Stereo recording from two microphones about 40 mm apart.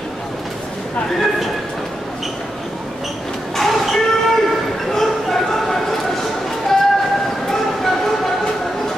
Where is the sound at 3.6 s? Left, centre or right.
Centre.